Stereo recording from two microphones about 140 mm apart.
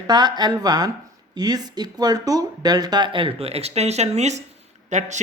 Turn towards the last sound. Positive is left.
turn(degrees=-55)  # may be behind; listen again after turning